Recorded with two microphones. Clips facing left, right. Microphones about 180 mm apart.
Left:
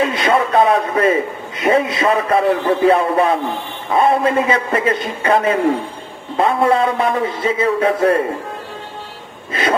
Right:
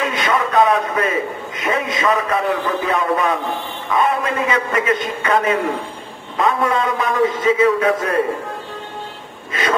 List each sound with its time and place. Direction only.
0.0 s a sound: 30° left (ahead or behind)
1.6 s a man's voice: 35° left (ahead or behind)
9.5 s a man's voice: 35° left (ahead or behind)